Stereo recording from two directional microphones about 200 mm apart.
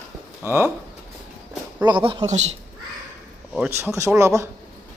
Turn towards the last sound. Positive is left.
turn(degrees=-15)  # may be behind; listen again after turning